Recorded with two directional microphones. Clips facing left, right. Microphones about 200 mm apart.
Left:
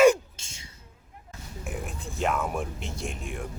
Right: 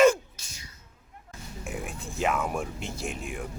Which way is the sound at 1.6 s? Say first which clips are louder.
Even; centre (ahead or behind).